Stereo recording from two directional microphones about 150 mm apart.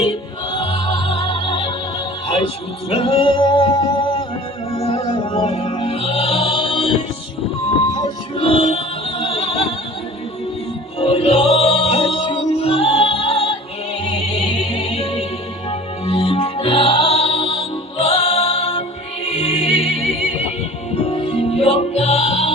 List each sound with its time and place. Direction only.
0.0 s music: 35° left (ahead or behind)
2.9 s music: 40° left (ahead or behind)
5.0 s music: 30° left (ahead or behind)
7.9 s music: 30° left (ahead or behind)
11.0 s music: 40° left (ahead or behind)
20.9 s music: 40° left (ahead or behind)